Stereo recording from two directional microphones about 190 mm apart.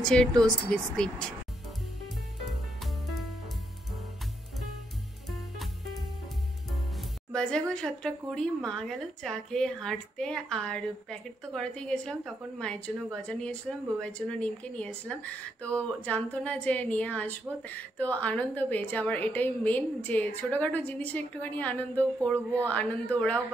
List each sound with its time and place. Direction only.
0.0 s a woman's voice: 5° left (ahead or behind)
2.8 s music: centre (ahead or behind)
5.3 s music: centre (ahead or behind)
7.3 s a woman's voice: 5° left (ahead or behind)